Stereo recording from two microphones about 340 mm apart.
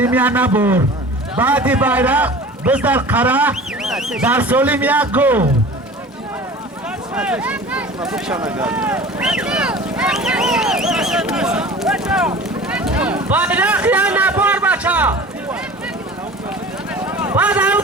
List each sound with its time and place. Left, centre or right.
0.0 s a man's voice: centre
7.2 s a man's voice: centre
12.6 s a sound: centre
17.2 s speech: centre